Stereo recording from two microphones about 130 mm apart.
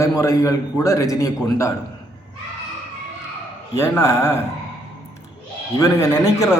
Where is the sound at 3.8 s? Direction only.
20° left (ahead or behind).